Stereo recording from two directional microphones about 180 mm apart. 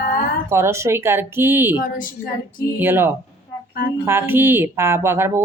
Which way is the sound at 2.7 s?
10° right (ahead or behind).